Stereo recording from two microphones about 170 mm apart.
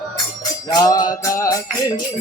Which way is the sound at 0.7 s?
20° left (ahead or behind).